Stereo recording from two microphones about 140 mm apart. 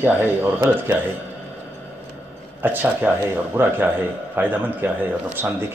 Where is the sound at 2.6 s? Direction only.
15° right (ahead or behind).